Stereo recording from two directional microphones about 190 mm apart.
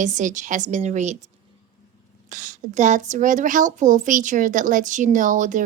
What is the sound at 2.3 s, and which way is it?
A woman's voice, 40° right (ahead or behind).